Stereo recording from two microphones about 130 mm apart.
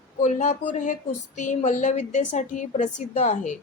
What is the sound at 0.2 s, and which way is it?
A woman's voice, 70° left (ahead or behind).